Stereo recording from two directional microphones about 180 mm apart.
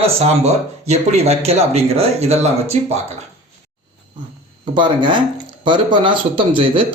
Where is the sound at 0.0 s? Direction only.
35° right (ahead or behind).